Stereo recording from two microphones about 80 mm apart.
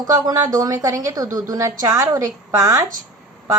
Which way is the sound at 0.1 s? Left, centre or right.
Right.